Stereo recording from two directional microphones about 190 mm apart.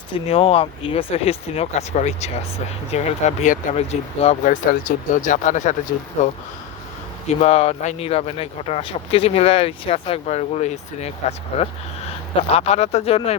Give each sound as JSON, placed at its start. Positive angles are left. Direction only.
{"t": 0.1, "sound": "speech", "side_deg": 30}